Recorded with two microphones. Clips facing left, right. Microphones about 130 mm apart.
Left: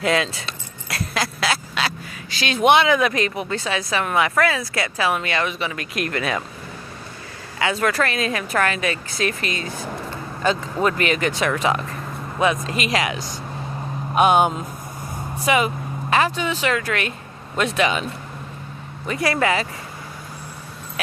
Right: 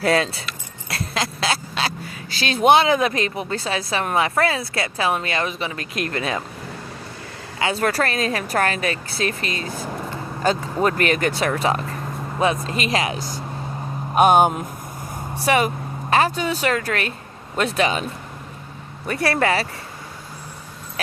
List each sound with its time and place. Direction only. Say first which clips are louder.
0.0 s speech: right 2 dB; 35° right (ahead or behind)
0.9 s a sound: even; 25° right (ahead or behind)
2.3 s speech: right 1 dB; 35° right (ahead or behind)
7.6 s speech: even; 35° right (ahead or behind)
14.2 s speech: right 2 dB; 45° right (ahead or behind)
19.0 s speech: even; 35° right (ahead or behind)